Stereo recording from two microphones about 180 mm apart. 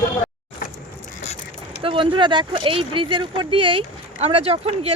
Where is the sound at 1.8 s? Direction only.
30° right (ahead or behind).